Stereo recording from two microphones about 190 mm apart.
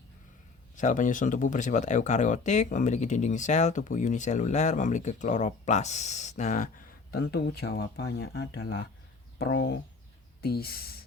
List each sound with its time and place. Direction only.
0.8 s speech: 40° left (ahead or behind)
7.1 s speech: 55° left (ahead or behind)